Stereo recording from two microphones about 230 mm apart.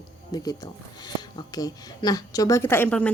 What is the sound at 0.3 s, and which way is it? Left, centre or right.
A woman's voice, centre.